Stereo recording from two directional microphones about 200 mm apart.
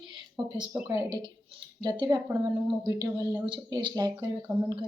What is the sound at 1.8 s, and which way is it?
A woman's voice, 20° right (ahead or behind).